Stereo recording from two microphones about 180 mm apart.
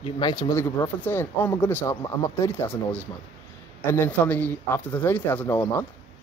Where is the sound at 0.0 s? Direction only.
25° left (ahead or behind).